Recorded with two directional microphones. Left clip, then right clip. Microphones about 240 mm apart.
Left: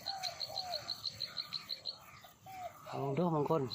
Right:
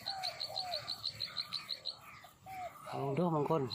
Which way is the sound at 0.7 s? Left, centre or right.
Right.